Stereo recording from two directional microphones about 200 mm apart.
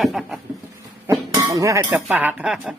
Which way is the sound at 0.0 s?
Centre (ahead or behind).